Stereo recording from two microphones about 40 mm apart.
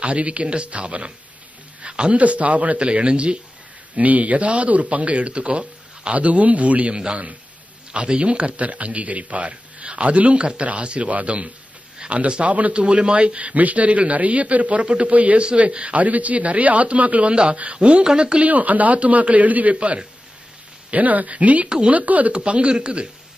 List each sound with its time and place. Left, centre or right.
0.0 s speech: right
2.1 s speech: right
3.9 s speech: right
12.0 s a sound: right
12.4 s speech: right
12.8 s speech: right
17.3 s speech: right
18.5 s speech: right
19.7 s speech: right
20.9 s speech: right
21.6 s speech: right
21.9 s speech: right
22.3 s speech: right